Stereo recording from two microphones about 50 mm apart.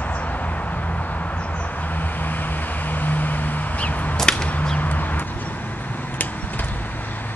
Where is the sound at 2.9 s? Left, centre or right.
Left.